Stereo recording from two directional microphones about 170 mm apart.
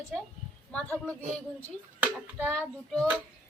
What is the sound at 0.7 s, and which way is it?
Speech, 10° left (ahead or behind).